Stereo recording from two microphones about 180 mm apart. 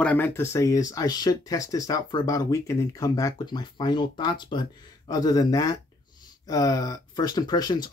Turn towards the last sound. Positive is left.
turn(degrees=25)  # may be behind; listen again after turning